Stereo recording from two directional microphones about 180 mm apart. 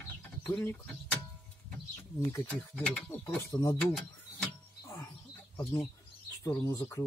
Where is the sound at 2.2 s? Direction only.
10° left (ahead or behind).